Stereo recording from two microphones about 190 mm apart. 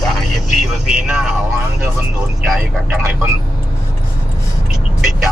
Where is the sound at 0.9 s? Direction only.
5° right (ahead or behind).